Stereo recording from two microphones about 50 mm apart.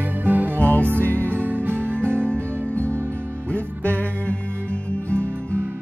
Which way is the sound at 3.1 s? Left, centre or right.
Right.